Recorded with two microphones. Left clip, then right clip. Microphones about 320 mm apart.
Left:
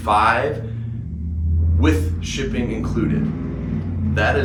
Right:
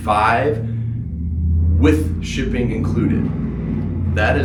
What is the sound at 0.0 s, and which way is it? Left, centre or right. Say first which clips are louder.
Speech: even; centre.